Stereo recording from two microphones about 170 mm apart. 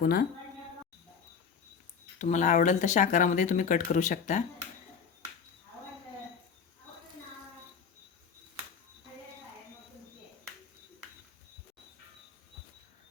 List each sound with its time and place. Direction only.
0.0 s speech: 60° left (ahead or behind)
2.1 s speech: 45° left (ahead or behind)